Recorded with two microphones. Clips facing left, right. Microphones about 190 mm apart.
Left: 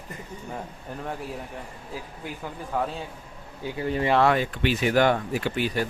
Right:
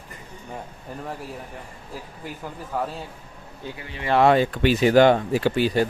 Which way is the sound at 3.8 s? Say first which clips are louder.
Left 11 dB; 40° left (ahead or behind).